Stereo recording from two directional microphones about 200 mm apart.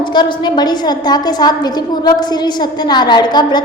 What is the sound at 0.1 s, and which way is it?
A woman's voice, 20° left (ahead or behind).